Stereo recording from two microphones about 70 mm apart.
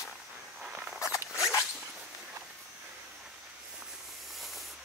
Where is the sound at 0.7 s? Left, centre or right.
Centre.